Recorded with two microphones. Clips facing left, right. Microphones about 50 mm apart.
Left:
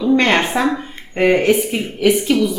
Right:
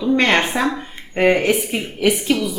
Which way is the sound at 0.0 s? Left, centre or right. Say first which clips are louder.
Left 2 dB; centre.